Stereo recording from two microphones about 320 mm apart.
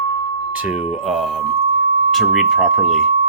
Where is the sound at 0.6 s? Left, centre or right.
Centre.